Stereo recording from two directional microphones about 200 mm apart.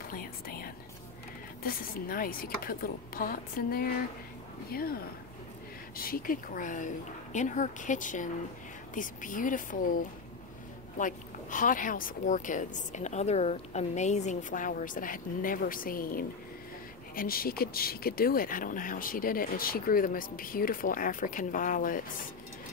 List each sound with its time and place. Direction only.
0.1 s a woman's voice: 45° left (ahead or behind)